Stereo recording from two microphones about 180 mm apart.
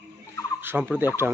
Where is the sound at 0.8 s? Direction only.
5° right (ahead or behind).